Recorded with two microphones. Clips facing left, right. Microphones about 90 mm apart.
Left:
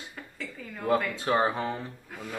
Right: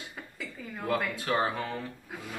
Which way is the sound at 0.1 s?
5° right (ahead or behind).